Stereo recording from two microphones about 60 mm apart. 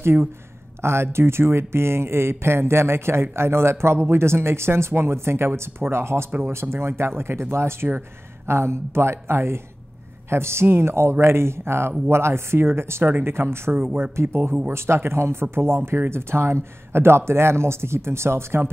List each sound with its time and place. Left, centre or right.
0.0 s speech: right